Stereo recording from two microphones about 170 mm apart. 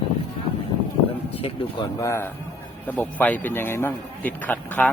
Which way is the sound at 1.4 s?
35° left (ahead or behind).